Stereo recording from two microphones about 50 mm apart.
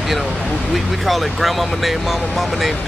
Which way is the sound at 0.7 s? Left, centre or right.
Centre.